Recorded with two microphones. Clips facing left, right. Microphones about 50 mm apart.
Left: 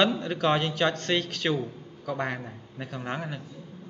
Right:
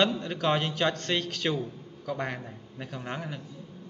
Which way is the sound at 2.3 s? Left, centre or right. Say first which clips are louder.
Left 2 dB; centre.